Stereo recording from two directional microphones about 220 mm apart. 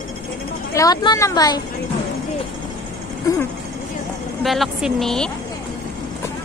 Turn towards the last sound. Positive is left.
turn(degrees=0)  # may be behind; listen again after turning